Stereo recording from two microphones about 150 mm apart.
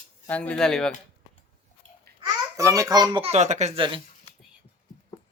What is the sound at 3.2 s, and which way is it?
Speech, 50° right (ahead or behind).